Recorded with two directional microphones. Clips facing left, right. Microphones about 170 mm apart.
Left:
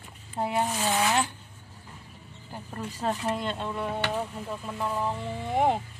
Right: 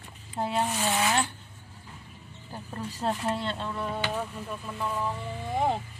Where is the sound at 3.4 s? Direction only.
15° left (ahead or behind).